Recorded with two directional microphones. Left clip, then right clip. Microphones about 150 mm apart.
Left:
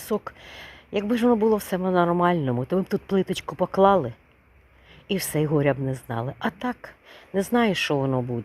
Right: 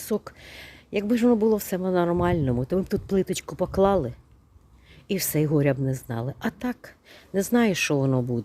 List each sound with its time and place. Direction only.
0.0 s speech: 30° right (ahead or behind)